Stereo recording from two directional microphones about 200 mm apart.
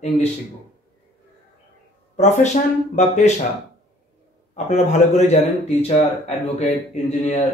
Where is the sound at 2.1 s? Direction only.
35° left (ahead or behind).